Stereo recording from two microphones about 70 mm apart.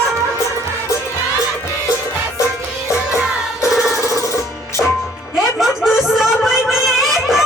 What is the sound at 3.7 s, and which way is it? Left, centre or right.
Music, centre.